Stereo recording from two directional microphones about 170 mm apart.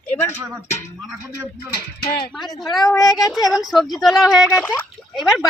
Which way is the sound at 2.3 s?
Centre (ahead or behind).